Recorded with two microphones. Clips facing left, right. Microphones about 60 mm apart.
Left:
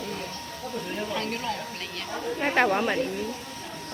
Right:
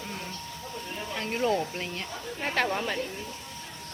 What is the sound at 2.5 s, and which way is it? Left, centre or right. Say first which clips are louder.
Speech: left 5 dB; left.